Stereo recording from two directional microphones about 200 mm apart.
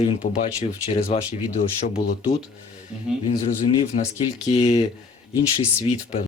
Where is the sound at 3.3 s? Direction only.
30° left (ahead or behind).